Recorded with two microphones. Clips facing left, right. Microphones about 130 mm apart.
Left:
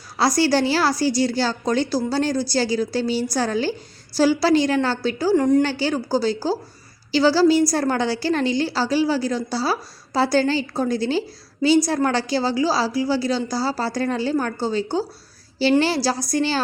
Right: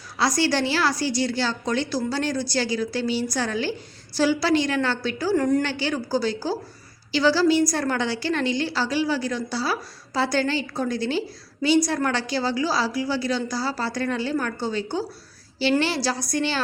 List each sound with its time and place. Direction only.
0.2 s a woman's voice: 35° left (ahead or behind)
5.4 s a woman's voice: 20° left (ahead or behind)
5.6 s a woman's voice: 35° left (ahead or behind)